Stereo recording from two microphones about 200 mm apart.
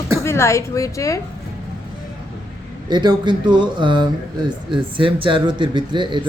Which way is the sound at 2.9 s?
20° right (ahead or behind).